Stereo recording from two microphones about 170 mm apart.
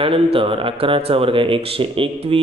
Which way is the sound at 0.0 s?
35° right (ahead or behind).